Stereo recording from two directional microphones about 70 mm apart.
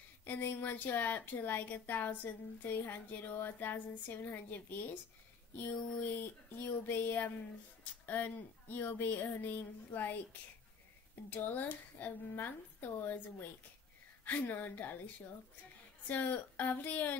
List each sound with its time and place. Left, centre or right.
0.2 s a woman's voice: left
11.3 s a woman's voice: left
16.1 s a woman's voice: left